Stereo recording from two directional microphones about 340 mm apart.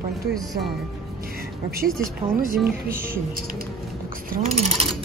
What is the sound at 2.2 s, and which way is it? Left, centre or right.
Speech, centre.